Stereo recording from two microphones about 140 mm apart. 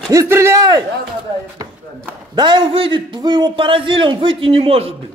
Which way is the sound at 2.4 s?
35° right (ahead or behind).